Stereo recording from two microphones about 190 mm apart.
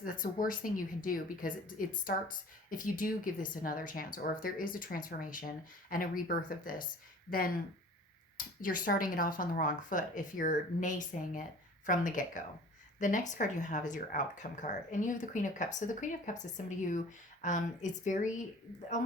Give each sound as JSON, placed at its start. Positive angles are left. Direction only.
{"t": 0.0, "sound": "speech", "side_deg": 45}